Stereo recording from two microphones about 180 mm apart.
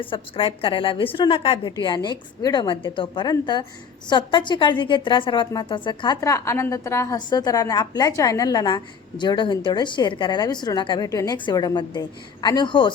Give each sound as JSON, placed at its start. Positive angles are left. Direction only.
{"t": 0.0, "sound": "a woman's voice", "side_deg": 30}